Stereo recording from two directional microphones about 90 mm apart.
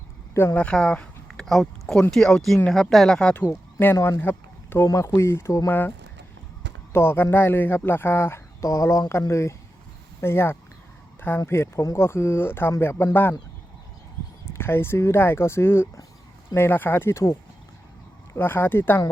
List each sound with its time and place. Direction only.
0.3 s speech: 20° left (ahead or behind)
4.2 s speech: 25° left (ahead or behind)
6.9 s speech: 25° left (ahead or behind)
14.6 s speech: 25° left (ahead or behind)
18.3 s speech: 25° left (ahead or behind)